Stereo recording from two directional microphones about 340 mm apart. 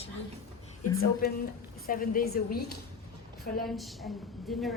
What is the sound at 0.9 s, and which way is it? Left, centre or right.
A woman's voice, left.